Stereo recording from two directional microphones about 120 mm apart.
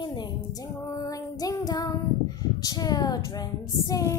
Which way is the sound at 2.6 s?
30° left (ahead or behind).